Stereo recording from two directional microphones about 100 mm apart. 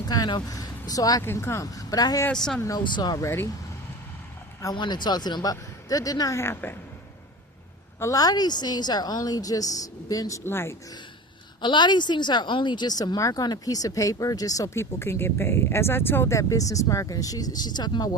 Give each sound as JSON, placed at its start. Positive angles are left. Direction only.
{"t": 0.0, "sound": "speech", "side_deg": 45}
{"t": 1.2, "sound": "a woman's voice", "side_deg": 25}
{"t": 2.3, "sound": "speech", "side_deg": 5}
{"t": 2.7, "sound": "a woman's voice", "side_deg": 45}
{"t": 3.2, "sound": "a woman's voice", "side_deg": 30}
{"t": 4.6, "sound": "a woman's voice", "side_deg": 45}
{"t": 6.4, "sound": "a woman's voice", "side_deg": 25}
{"t": 7.9, "sound": "a woman's voice", "side_deg": 35}
{"t": 11.6, "sound": "a woman's voice", "side_deg": 50}